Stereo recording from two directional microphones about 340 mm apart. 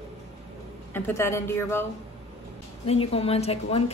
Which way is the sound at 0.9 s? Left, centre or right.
Centre.